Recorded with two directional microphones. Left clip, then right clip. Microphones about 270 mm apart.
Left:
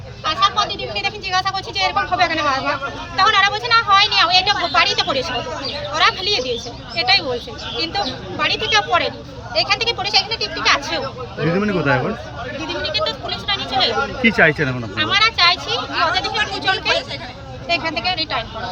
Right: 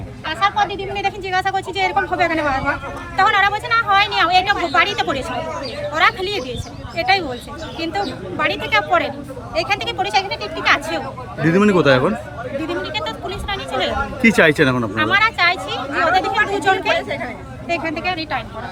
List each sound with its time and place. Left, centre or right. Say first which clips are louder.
0.3 s a woman's voice: left 1 dB; centre
12.6 s speech: left 4 dB; centre
14.9 s speech: left 2 dB; centre
15.8 s a sound: right 1 dB; right
17.7 s speech: left 1 dB; centre